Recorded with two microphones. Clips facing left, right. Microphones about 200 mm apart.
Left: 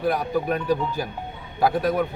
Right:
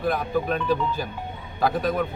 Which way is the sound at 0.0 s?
10° left (ahead or behind).